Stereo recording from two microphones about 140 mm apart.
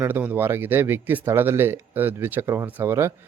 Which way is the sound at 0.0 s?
15° right (ahead or behind).